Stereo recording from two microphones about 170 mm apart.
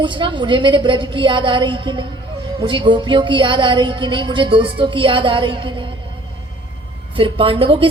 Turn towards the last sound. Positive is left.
turn(degrees=-30)  # may be behind; listen again after turning